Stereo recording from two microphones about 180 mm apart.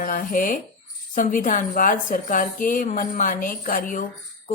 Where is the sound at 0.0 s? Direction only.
50° left (ahead or behind).